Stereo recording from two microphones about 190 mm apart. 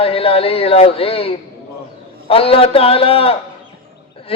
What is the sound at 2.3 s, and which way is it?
Speech, 30° left (ahead or behind).